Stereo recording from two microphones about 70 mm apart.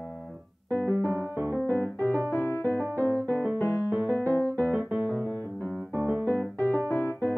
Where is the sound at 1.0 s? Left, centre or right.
Right.